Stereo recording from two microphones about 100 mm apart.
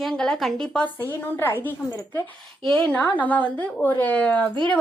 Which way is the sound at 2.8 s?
15° left (ahead or behind).